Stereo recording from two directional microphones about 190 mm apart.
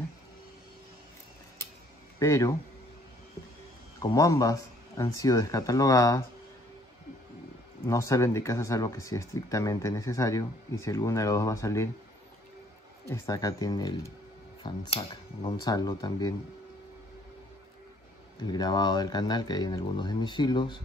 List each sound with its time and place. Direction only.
2.1 s a man's voice: 15° left (ahead or behind)
4.0 s a man's voice: 15° left (ahead or behind)
7.8 s speech: 15° left (ahead or behind)
13.1 s speech: 20° left (ahead or behind)
18.4 s speech: 20° left (ahead or behind)